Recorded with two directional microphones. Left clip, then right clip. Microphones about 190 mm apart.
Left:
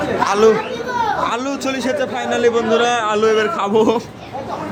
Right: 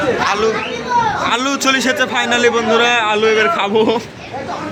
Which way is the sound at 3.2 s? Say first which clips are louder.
Right 2 dB; 15° left (ahead or behind).